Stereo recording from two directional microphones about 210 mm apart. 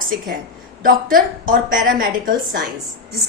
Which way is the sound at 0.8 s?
40° right (ahead or behind).